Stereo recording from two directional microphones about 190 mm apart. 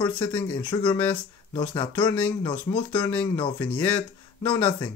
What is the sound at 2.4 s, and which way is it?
Speech, 25° left (ahead or behind).